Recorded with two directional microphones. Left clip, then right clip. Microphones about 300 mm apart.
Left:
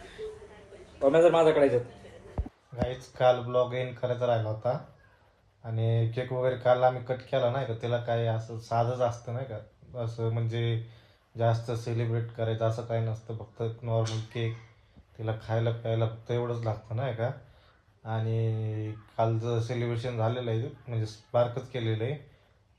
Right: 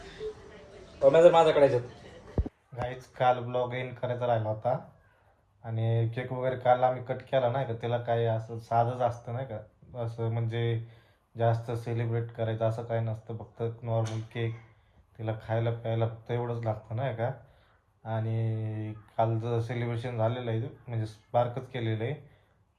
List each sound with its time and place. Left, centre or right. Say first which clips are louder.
1.1 s a man's voice: right 2 dB; left
2.8 s speech: left 2 dB; centre